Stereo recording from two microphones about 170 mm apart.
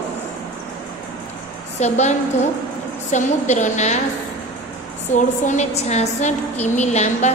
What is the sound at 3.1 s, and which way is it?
Speech, 45° left (ahead or behind).